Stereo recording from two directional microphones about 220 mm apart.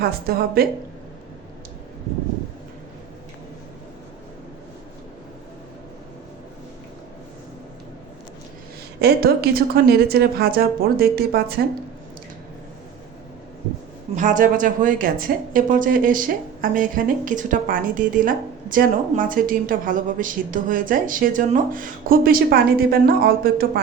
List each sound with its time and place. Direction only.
0.0 s a woman's voice: 45° right (ahead or behind)
9.0 s a woman's voice: 45° right (ahead or behind)
14.2 s speech: 35° right (ahead or behind)